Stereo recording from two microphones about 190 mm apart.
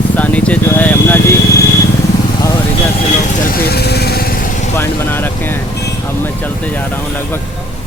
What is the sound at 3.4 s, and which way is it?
Vehicle, 55° left (ahead or behind).